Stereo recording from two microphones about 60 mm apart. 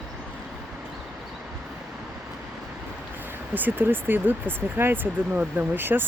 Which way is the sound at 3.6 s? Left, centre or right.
Right.